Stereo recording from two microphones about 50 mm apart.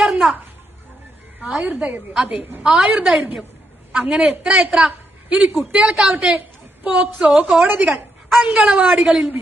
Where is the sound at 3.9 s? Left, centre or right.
Right.